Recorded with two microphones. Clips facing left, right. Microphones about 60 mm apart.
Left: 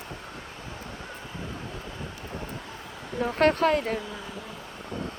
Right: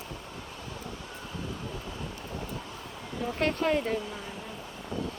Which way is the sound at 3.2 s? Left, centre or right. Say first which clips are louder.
Left 6 dB; left.